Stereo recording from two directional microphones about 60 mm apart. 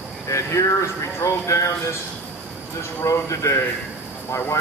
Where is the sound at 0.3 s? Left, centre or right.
Left.